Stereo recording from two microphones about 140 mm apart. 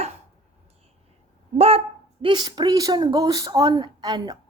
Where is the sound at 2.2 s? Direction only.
30° right (ahead or behind).